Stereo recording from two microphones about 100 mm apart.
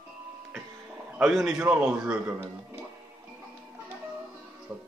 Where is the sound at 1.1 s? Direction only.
5° right (ahead or behind).